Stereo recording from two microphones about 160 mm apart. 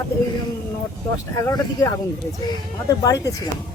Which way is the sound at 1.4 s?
20° left (ahead or behind).